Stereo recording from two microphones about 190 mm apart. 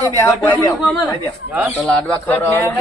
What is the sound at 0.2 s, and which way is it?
Speech, 15° left (ahead or behind).